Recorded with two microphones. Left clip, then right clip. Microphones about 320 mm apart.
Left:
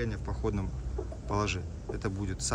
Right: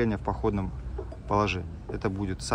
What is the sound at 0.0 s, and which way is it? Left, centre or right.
Speech, centre.